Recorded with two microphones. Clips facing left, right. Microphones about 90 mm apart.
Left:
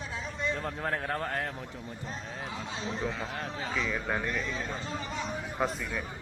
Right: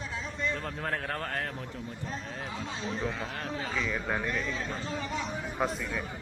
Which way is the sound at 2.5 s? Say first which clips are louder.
Even; centre (ahead or behind).